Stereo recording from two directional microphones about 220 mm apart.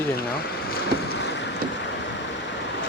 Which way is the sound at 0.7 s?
50° left (ahead or behind).